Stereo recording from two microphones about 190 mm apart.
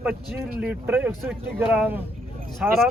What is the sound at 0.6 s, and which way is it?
A man's voice, 5° right (ahead or behind).